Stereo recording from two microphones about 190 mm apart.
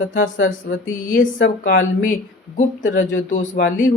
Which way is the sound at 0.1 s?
80° left.